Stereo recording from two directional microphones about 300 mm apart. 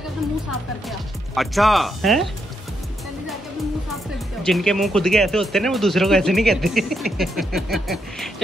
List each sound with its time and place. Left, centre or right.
0.8 s speech: centre
4.5 s speech: centre